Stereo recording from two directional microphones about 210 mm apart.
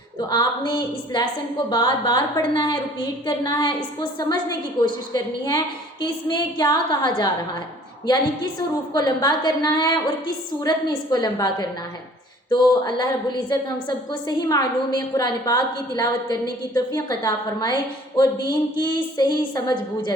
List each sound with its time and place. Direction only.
0.3 s a woman's voice: 20° left (ahead or behind)
8.9 s a woman's voice: 20° left (ahead or behind)